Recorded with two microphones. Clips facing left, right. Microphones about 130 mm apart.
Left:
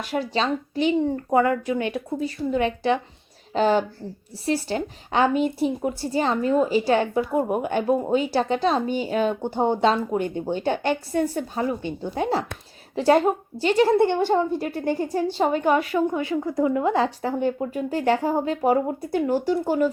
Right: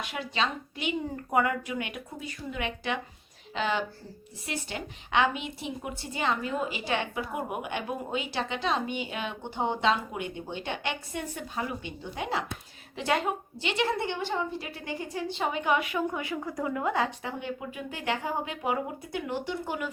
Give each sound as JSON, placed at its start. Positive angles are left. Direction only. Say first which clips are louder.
{"t": 0.0, "sound": "a woman's voice", "louder": "left 7 dB", "side_deg": 40}